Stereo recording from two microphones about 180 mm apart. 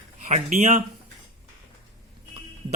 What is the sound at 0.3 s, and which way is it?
Speech, 40° right (ahead or behind).